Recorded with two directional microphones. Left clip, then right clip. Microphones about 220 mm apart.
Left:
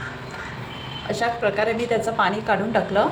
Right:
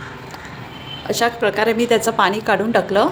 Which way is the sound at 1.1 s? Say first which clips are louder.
Right 4 dB; 55° right (ahead or behind).